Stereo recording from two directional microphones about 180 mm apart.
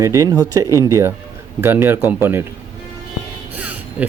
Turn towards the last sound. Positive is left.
turn(degrees=-10)  # may be behind; listen again after turning